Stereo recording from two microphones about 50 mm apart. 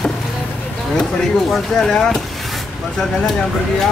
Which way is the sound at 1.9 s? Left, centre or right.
Centre.